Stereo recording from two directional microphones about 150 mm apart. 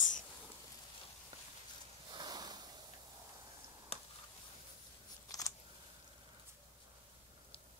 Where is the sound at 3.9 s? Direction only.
45° left (ahead or behind).